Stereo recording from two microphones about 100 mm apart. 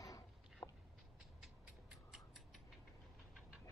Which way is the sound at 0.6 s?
30° left (ahead or behind).